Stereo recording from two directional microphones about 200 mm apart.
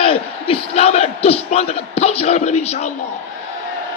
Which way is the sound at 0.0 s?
30° left (ahead or behind).